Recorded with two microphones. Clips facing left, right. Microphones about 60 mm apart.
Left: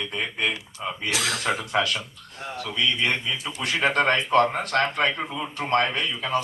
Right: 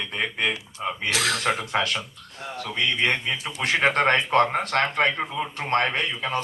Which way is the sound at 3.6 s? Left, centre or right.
Right.